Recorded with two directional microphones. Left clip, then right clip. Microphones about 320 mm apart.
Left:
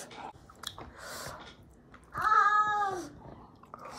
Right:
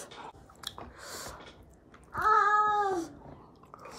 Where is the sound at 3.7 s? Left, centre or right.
Centre.